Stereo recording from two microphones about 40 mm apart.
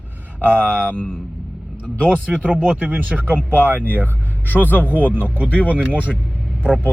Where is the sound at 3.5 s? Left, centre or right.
Right.